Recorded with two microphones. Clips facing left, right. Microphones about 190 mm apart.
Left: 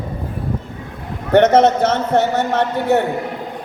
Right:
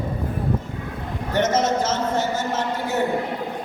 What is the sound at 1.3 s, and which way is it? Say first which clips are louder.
A man's voice: left 9 dB; 65° left (ahead or behind).